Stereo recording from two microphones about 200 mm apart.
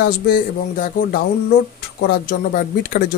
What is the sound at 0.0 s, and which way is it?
Speech, 45° left (ahead or behind).